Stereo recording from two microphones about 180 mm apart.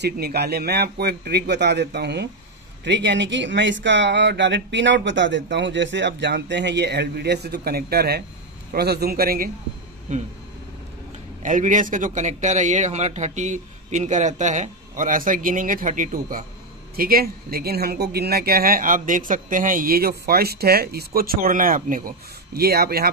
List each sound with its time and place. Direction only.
0.0 s a man's voice: 60° right (ahead or behind)
10.1 s a sound: 40° right (ahead or behind)
11.4 s a man's voice: 45° right (ahead or behind)